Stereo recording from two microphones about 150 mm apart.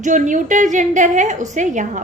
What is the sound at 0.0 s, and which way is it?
A woman's voice, 55° right (ahead or behind).